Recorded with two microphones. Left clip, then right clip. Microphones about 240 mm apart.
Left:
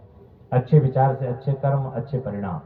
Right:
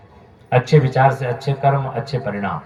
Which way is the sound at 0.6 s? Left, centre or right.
Right.